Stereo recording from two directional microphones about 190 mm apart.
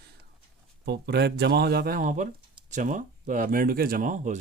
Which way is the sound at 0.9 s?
60° right (ahead or behind).